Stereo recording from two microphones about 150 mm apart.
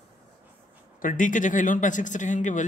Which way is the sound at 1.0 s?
60° left (ahead or behind).